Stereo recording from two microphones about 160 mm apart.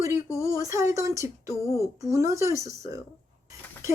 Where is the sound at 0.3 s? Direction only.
20° left (ahead or behind).